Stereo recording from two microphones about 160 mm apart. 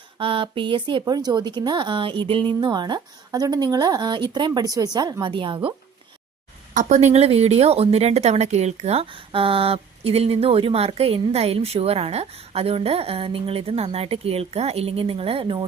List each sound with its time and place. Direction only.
0.2 s speech: 35° right (ahead or behind)
6.7 s speech: 45° right (ahead or behind)